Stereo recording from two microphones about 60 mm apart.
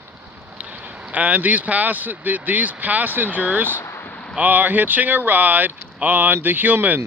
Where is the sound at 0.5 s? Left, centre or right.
Right.